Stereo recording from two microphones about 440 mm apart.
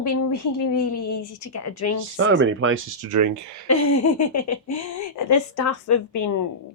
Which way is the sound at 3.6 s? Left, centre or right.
Left.